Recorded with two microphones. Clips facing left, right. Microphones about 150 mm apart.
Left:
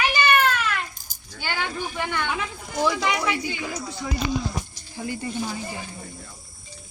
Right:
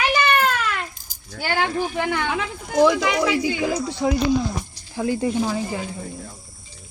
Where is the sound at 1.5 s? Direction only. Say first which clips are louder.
Right 6 dB; 85° right.